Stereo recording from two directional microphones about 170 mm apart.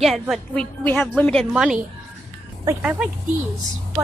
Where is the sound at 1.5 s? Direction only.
5° right (ahead or behind).